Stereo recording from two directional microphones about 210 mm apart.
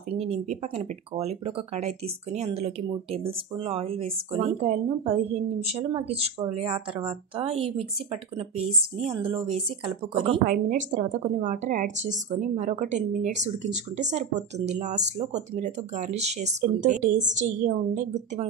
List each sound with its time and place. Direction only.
0.2 s speech: 30° right (ahead or behind)
10.1 s speech: 25° right (ahead or behind)
10.4 s speech: 40° right (ahead or behind)